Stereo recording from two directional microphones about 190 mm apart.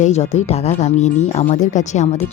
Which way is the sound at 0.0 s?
35° left (ahead or behind).